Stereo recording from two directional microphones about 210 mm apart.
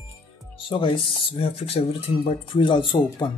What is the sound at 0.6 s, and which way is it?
Speech, 25° left (ahead or behind).